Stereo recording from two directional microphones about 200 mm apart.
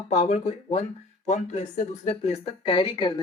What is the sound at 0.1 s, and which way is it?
Speech, 35° left (ahead or behind).